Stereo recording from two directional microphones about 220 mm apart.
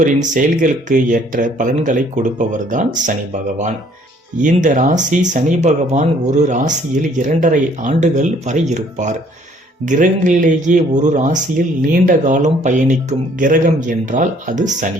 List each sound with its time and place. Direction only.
0.0 s speech: 35° right (ahead or behind)
4.4 s speech: 35° right (ahead or behind)